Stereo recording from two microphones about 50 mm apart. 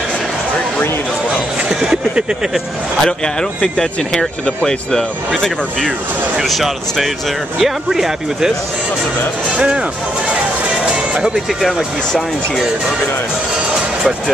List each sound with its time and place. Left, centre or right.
1.7 s speech: centre
3.0 s speech: centre
9.6 s speech: centre